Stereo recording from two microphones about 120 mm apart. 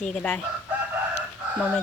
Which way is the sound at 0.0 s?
10° left (ahead or behind).